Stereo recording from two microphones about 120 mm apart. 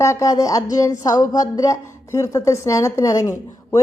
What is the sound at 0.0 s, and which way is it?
Speech, 25° left (ahead or behind).